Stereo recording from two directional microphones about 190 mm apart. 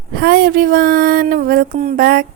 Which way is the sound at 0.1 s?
55° right (ahead or behind).